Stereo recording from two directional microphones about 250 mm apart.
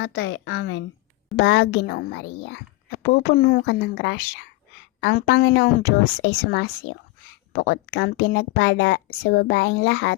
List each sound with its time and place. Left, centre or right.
0.0 s speech: left